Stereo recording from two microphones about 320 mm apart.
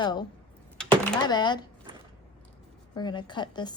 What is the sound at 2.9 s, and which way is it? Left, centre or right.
Speech, centre.